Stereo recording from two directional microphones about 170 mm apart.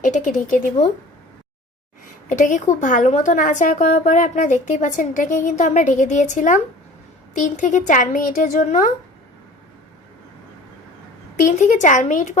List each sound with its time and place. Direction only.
0.0 s a woman's voice: 45° left (ahead or behind)
2.3 s a woman's voice: 45° left (ahead or behind)
11.3 s a woman's voice: 50° left (ahead or behind)